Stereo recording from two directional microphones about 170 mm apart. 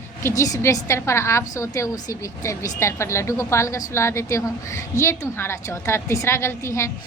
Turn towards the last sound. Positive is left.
turn(degrees=15)  # may be behind; listen again after turning